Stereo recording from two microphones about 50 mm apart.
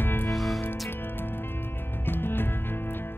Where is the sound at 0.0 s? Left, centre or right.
Left.